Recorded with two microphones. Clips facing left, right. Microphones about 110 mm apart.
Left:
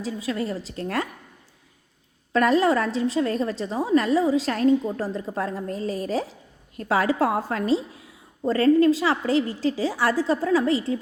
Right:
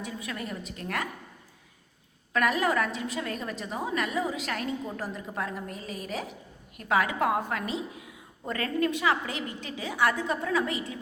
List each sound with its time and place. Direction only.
0.0 s a woman's voice: 30° left (ahead or behind)
2.3 s a woman's voice: 30° left (ahead or behind)